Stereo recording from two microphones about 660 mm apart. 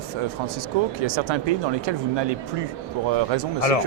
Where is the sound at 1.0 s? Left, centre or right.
Right.